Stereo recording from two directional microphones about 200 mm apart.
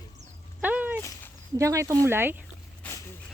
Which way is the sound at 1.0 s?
15° left (ahead or behind).